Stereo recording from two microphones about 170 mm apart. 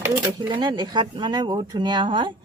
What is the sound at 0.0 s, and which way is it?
Speech, 25° right (ahead or behind).